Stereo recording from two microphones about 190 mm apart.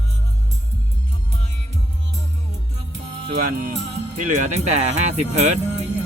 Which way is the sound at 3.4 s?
45° right (ahead or behind).